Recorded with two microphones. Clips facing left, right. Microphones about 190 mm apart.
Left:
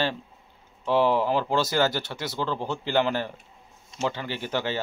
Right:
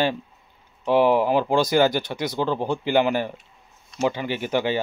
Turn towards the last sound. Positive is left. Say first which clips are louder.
# right 5 dB
turn(degrees=-15)  # may be behind; listen again after turning